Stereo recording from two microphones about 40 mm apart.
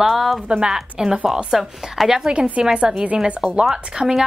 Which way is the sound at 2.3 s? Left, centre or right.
Centre.